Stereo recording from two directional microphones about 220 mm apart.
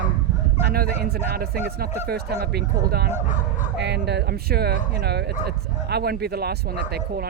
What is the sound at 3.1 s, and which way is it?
Speech, 35° left (ahead or behind).